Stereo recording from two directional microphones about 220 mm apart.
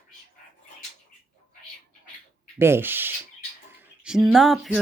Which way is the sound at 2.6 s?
10° right (ahead or behind).